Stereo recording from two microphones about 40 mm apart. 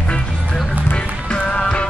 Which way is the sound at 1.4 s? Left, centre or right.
Left.